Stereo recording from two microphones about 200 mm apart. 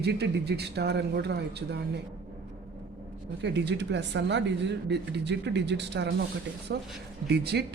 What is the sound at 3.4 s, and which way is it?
A man's voice, 60° right (ahead or behind).